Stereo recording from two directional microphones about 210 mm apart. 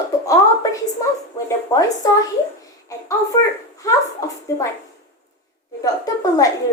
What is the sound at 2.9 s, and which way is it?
A woman's voice, 15° left (ahead or behind).